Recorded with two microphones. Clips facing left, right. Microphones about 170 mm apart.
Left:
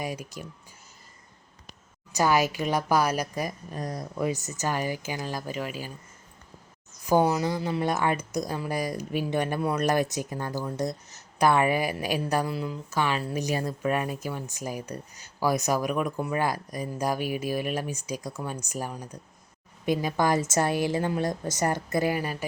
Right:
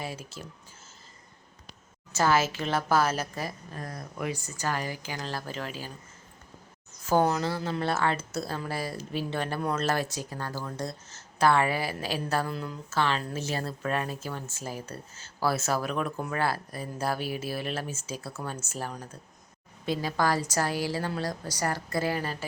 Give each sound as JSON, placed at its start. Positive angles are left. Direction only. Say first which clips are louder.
{"t": 0.0, "sound": "speech", "louder": "left 4 dB", "side_deg": 15}
{"t": 2.1, "sound": "speech", "louder": "left 2 dB", "side_deg": 15}
{"t": 7.0, "sound": "a woman's voice", "louder": "left 2 dB", "side_deg": 10}